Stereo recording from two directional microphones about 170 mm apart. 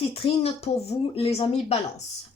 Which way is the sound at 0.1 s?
35° left (ahead or behind).